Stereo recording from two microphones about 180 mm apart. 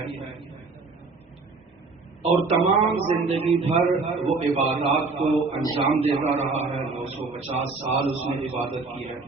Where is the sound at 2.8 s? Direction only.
30° right (ahead or behind).